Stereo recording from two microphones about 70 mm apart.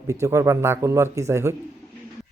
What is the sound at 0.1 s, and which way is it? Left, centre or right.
Speech, right.